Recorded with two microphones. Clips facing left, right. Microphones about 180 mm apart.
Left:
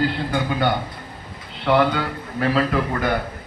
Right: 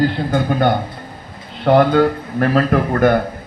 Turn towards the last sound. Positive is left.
turn(degrees=-50)  # may be behind; listen again after turning